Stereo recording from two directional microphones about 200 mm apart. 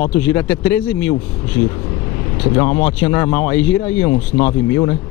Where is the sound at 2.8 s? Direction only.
15° left (ahead or behind).